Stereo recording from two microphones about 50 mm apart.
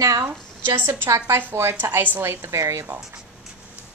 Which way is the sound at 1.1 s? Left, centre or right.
Right.